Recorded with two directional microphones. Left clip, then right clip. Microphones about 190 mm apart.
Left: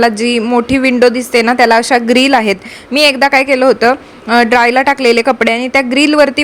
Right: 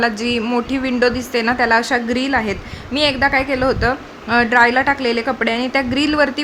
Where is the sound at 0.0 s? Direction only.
30° left (ahead or behind).